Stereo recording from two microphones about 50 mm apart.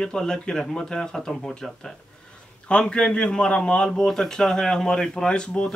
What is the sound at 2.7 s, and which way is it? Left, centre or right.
A man's voice, left.